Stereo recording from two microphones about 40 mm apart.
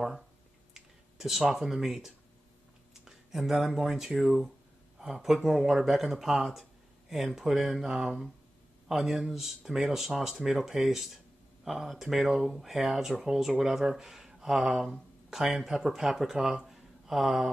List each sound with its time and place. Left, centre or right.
0.7 s speech: centre